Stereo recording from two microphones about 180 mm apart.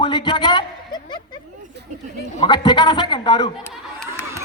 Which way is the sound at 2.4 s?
25° left (ahead or behind).